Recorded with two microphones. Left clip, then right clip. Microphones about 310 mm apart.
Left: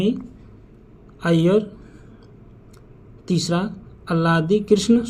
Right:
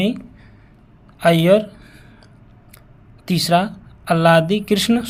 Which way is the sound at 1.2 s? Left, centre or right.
Right.